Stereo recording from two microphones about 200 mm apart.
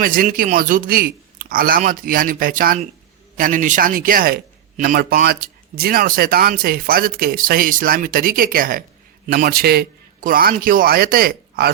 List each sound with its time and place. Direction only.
0.0 s speech: 45° right (ahead or behind)